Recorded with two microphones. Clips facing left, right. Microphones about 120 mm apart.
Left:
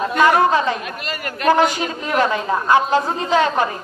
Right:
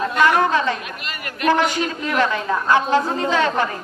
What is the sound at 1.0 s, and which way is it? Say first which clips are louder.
Speech: left 1 dB; 40° left (ahead or behind).